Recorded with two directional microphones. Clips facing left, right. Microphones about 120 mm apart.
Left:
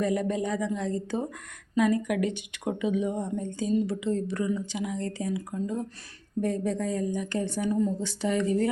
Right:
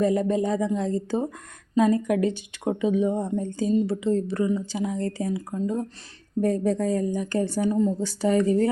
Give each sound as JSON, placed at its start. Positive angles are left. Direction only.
{"t": 0.0, "sound": "speech", "side_deg": -30}